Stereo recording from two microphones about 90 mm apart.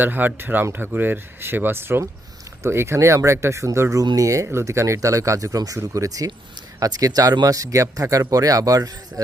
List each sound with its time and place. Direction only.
0.0 s speech: 20° right (ahead or behind); by 9.2 s 40° right (ahead or behind)